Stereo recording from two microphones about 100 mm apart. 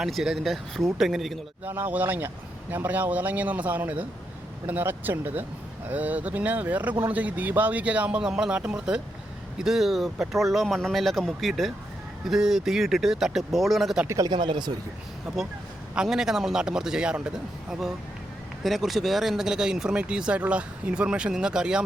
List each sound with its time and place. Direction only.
0.0 s speech: 5° right (ahead or behind)
1.6 s speech: 20° right (ahead or behind); by 14.0 s centre (ahead or behind)
14.3 s speech: 50° right (ahead or behind)
15.3 s speech: 5° right (ahead or behind)